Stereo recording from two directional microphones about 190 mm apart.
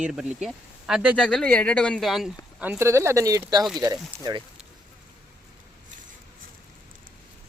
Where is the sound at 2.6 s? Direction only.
10° right (ahead or behind).